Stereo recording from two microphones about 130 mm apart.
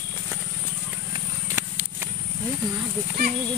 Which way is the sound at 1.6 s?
15° right (ahead or behind).